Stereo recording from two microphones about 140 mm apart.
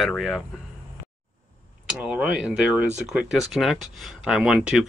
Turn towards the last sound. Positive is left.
turn(degrees=-5)  # may be behind; listen again after turning